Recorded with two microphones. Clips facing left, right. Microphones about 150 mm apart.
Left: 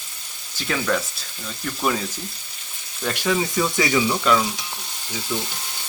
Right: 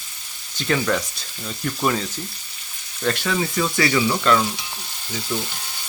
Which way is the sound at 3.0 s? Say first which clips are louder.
Even; 10° left (ahead or behind).